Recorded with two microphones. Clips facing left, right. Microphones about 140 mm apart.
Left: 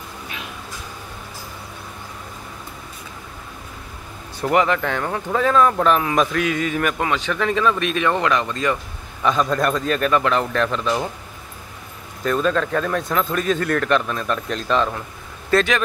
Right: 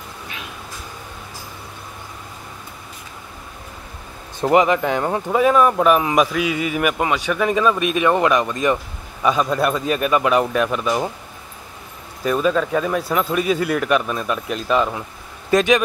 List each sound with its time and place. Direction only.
4.4 s speech: 20° right (ahead or behind)
12.2 s speech: 10° right (ahead or behind)